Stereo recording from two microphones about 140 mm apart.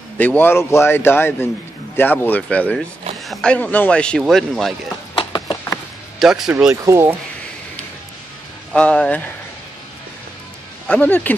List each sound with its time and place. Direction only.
0.2 s a man's voice: 15° left (ahead or behind)
5.1 s a sound: 35° left (ahead or behind)
6.1 s speech: centre (ahead or behind)
6.7 s speech: 20° right (ahead or behind)
8.7 s a man's voice: 5° left (ahead or behind)
10.9 s a man's voice: 10° left (ahead or behind)